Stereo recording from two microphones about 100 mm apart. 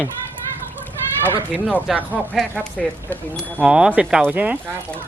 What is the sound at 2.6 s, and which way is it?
Speech, 15° left (ahead or behind).